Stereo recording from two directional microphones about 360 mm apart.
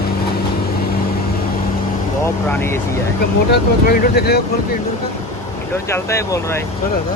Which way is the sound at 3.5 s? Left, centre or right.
Left.